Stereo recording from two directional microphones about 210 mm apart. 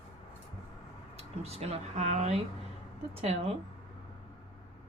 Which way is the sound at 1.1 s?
30° right (ahead or behind).